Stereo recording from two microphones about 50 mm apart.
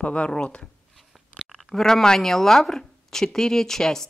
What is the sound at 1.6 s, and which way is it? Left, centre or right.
Speech, centre.